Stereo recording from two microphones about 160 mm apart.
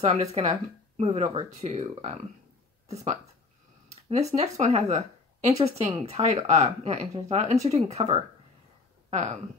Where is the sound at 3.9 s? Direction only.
45° right (ahead or behind).